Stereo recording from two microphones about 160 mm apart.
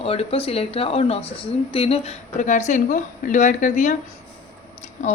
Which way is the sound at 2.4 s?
50° left (ahead or behind).